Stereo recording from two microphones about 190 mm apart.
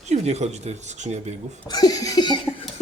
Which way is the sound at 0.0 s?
35° right (ahead or behind).